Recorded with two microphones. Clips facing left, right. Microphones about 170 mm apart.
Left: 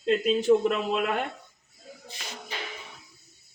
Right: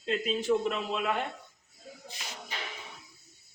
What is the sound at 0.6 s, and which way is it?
Speech, 65° left (ahead or behind).